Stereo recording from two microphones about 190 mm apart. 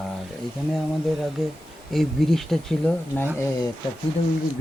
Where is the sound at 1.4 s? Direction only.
Centre (ahead or behind).